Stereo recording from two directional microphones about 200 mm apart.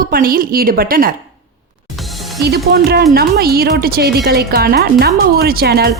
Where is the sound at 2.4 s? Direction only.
50° right (ahead or behind).